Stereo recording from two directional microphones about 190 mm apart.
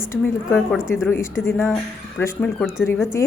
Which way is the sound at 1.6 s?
Centre (ahead or behind).